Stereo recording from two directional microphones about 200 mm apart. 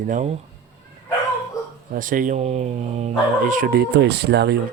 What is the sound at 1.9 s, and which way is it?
Speech, 40° right (ahead or behind).